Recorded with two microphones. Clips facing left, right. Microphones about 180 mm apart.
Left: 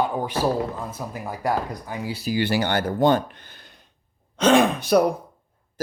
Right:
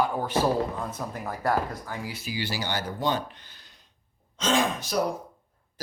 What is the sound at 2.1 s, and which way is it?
Speech, 35° left (ahead or behind).